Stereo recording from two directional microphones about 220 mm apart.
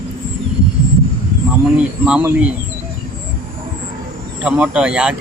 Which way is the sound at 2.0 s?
5° right (ahead or behind).